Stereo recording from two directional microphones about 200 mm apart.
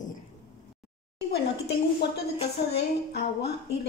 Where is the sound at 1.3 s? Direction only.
55° left (ahead or behind).